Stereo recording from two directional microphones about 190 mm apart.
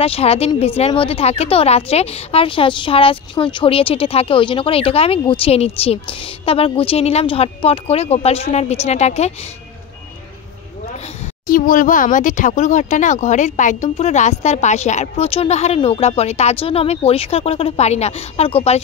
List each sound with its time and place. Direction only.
0.0 s speech: 30° left (ahead or behind)
11.4 s speech: 45° left (ahead or behind)